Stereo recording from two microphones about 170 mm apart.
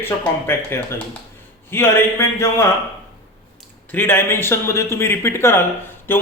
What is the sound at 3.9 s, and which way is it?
Speech, 10° left (ahead or behind).